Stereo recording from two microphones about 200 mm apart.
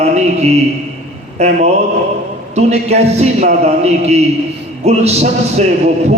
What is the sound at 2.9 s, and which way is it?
Speech, 30° right (ahead or behind).